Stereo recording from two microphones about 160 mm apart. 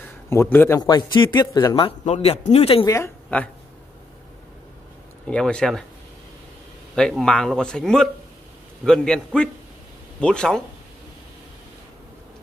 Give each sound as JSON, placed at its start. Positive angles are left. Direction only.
{"t": 0.3, "sound": "a man's voice", "side_deg": 15}
{"t": 0.7, "sound": "a man's voice", "side_deg": 25}
{"t": 1.9, "sound": "speech", "side_deg": 40}
{"t": 2.8, "sound": "a woman's voice", "side_deg": 15}
{"t": 5.2, "sound": "speech", "side_deg": 5}
{"t": 7.0, "sound": "speech", "side_deg": 5}